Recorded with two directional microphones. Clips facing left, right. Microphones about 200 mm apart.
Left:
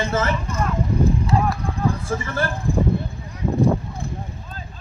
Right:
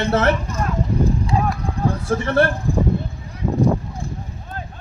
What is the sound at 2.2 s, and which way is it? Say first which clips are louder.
Speech: right 8 dB; 65° right (ahead or behind).